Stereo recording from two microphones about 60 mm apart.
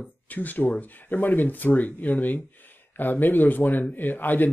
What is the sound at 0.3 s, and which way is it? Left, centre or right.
Speech, left.